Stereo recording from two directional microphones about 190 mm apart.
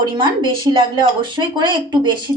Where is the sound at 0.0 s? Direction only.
25° right (ahead or behind).